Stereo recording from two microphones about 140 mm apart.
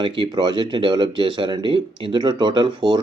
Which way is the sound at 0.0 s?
35° right (ahead or behind).